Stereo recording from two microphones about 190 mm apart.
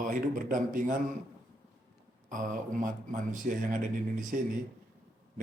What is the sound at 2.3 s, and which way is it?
A man's voice, 45° right (ahead or behind).